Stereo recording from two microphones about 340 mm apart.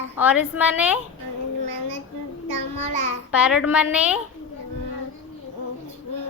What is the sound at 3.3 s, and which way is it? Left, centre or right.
Speech, centre.